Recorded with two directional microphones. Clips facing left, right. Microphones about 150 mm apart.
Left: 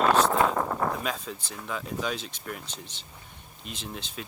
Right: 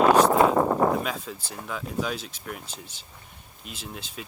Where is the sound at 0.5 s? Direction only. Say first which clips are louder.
Right 6 dB; 25° right (ahead or behind).